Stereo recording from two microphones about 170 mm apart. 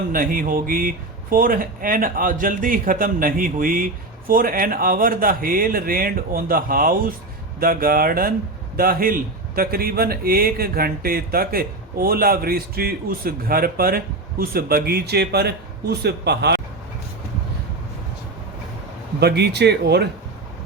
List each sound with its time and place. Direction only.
0.1 s a man's voice: 55° right (ahead or behind); by 16.6 s 75° right (ahead or behind)
19.2 s speech: 75° right (ahead or behind)